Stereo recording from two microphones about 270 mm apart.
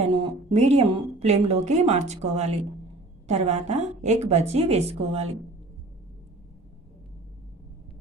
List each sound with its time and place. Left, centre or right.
0.1 s a woman's voice: right